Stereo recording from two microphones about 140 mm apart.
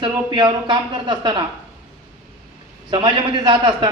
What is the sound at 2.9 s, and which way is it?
A man's voice, 35° right (ahead or behind).